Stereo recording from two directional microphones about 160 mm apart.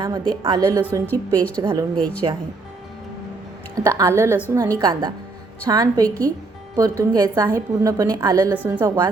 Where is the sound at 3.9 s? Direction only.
15° right (ahead or behind).